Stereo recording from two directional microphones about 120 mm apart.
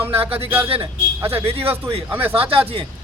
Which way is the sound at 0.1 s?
50° right (ahead or behind).